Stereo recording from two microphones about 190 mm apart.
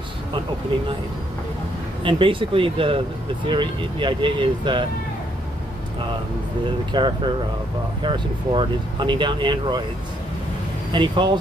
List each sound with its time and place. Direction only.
2.0 s speech: 25° right (ahead or behind)
6.9 s speech: 25° right (ahead or behind)
10.9 s speech: 25° right (ahead or behind)